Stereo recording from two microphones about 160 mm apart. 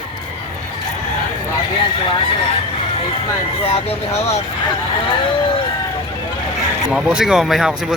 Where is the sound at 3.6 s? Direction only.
40° left (ahead or behind).